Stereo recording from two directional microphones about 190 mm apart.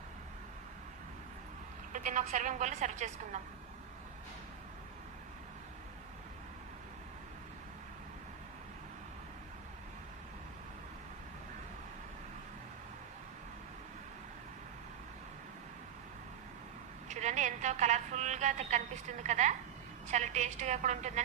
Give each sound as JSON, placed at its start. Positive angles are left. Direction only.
{"t": 1.9, "sound": "a woman's voice", "side_deg": -40}
{"t": 17.1, "sound": "a sound", "side_deg": -40}
{"t": 20.1, "sound": "a woman's voice", "side_deg": -40}